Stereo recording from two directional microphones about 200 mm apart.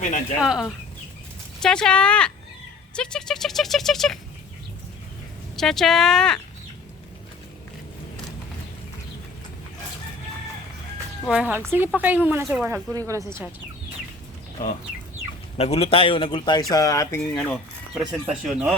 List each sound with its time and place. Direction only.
0.0 s speech: 40° left (ahead or behind)
0.4 s speech: 5° right (ahead or behind)
5.5 s speech: centre (ahead or behind)
11.3 s speech: 5° right (ahead or behind)
15.5 s a man's voice: 30° left (ahead or behind)
17.3 s speech: centre (ahead or behind)